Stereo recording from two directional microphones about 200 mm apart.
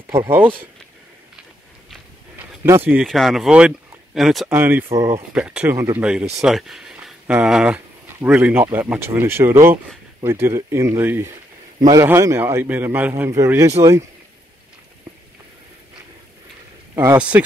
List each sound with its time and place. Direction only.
0.1 s a man's voice: 10° right (ahead or behind)
1.9 s a sound: 10° right (ahead or behind)
4.5 s a man's voice: 10° right (ahead or behind)
5.3 s a man's voice: 5° right (ahead or behind)
16.9 s a man's voice: 15° right (ahead or behind)